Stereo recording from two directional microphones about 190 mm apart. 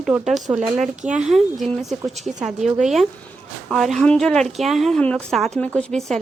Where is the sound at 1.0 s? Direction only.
40° right (ahead or behind).